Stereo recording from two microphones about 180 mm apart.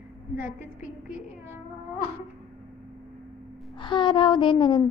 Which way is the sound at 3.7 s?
25° left (ahead or behind).